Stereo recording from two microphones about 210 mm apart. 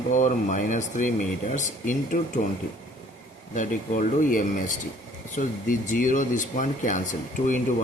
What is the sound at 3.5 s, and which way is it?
A man's voice, 40° left (ahead or behind).